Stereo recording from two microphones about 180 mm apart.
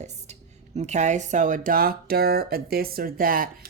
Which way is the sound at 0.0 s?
40° right (ahead or behind).